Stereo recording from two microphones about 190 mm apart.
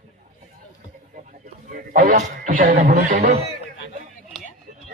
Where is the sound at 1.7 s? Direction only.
45° right (ahead or behind).